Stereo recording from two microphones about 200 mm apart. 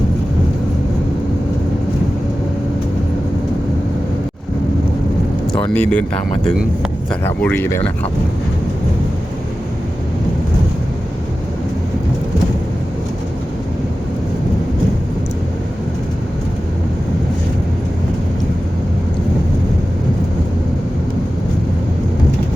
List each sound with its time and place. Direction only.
5.6 s speech: 5° left (ahead or behind)
7.1 s speech: 10° left (ahead or behind)